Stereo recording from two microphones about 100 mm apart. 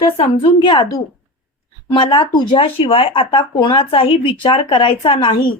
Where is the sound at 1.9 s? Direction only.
55° left (ahead or behind).